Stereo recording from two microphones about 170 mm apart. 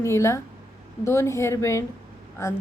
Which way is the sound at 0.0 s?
15° left (ahead or behind).